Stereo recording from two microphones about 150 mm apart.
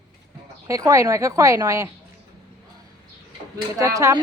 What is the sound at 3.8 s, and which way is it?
Speech, 25° right (ahead or behind).